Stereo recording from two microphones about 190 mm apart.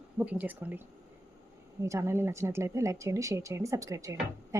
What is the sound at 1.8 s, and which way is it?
Speech, 15° right (ahead or behind).